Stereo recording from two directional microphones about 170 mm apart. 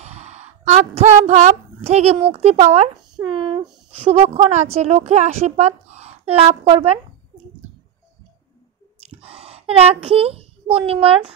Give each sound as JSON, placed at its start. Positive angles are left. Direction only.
{"t": 0.0, "sound": "speech", "side_deg": -40}
{"t": 3.3, "sound": "a woman's voice", "side_deg": -30}
{"t": 9.2, "sound": "a child's voice", "side_deg": -35}